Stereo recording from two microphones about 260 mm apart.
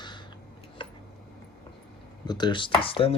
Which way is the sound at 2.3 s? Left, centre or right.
Centre.